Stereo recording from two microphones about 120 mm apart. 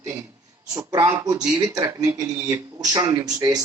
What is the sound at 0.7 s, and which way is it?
Speech, 25° right (ahead or behind).